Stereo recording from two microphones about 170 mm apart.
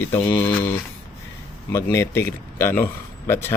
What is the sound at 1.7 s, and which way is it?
Speech, 15° left (ahead or behind).